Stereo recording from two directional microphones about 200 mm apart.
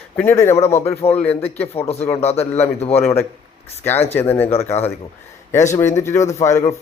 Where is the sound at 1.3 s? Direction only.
30° left (ahead or behind).